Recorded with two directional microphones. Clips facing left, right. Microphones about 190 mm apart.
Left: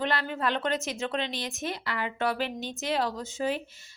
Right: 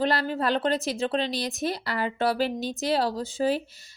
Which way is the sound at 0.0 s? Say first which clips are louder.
Right 4 dB; 35° right (ahead or behind).